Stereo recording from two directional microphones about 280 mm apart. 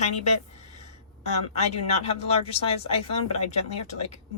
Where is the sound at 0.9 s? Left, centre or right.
Left.